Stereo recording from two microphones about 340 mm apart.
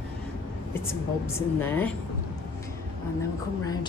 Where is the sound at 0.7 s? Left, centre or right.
Centre.